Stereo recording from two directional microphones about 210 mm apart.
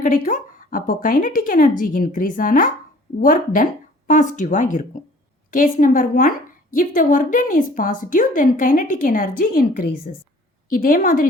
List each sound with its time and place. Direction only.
0.0 s a woman's voice: 40° left (ahead or behind)